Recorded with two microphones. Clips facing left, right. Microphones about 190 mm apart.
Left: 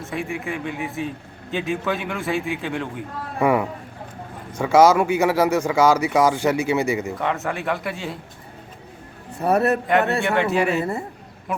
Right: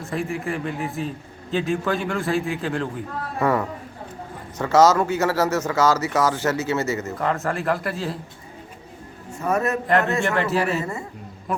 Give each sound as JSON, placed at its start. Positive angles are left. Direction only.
{"t": 0.0, "sound": "a man's voice", "side_deg": 0}
{"t": 3.3, "sound": "speech", "side_deg": 10}
{"t": 7.2, "sound": "a man's voice", "side_deg": 0}
{"t": 9.3, "sound": "a man's voice", "side_deg": 35}
{"t": 9.8, "sound": "a man's voice", "side_deg": 0}